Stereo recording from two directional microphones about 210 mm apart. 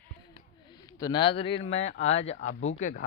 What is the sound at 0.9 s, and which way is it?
Speech, 15° left (ahead or behind).